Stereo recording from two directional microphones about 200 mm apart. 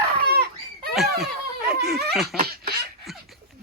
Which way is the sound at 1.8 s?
Centre (ahead or behind).